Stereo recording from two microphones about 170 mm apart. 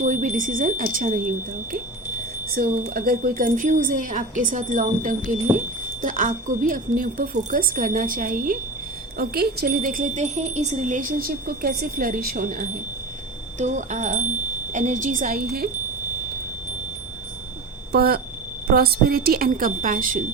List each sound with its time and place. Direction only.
0.0 s wind chime: 45° right (ahead or behind)
2.6 s wind chime: 60° right (ahead or behind)
9.1 s wind chime: 65° right (ahead or behind)
17.9 s speech: 65° right (ahead or behind)